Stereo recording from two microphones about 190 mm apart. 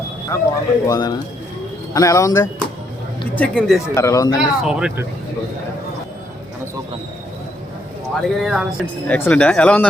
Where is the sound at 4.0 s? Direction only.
15° left (ahead or behind).